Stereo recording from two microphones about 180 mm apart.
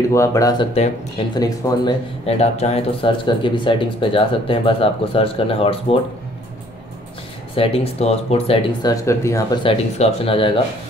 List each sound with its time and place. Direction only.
0.1 s speech: 15° left (ahead or behind)
0.7 s speech: 35° left (ahead or behind)
1.3 s speech: 25° left (ahead or behind)
7.5 s speech: 30° left (ahead or behind)
8.8 s speech: 15° left (ahead or behind)